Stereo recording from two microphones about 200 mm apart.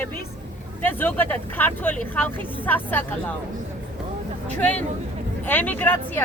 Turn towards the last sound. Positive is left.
turn(degrees=10)  # may be behind; listen again after turning